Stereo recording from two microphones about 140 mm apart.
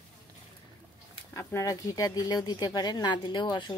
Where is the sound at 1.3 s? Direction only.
20° left (ahead or behind).